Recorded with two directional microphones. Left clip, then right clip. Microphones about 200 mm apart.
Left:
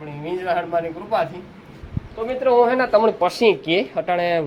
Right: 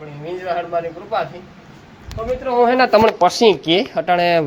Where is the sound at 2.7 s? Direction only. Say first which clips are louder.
Right 4 dB; 45° right (ahead or behind).